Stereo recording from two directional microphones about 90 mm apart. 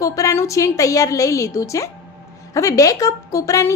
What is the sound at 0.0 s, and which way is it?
A woman's voice, 35° left (ahead or behind).